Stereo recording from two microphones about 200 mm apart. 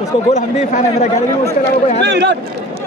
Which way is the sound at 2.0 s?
60° right (ahead or behind).